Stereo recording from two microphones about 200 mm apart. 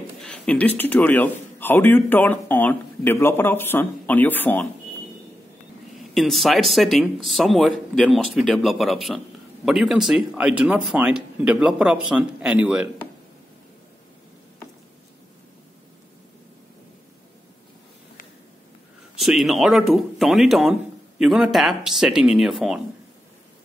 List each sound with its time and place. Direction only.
0.2 s a man's voice: 5° left (ahead or behind)
5.9 s speech: centre (ahead or behind)
19.1 s speech: centre (ahead or behind)